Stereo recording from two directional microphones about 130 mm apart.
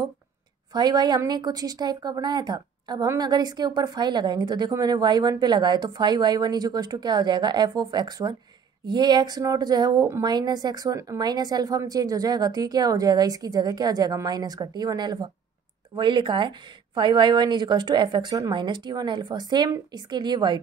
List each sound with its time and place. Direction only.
0.7 s a woman's voice: 35° right (ahead or behind)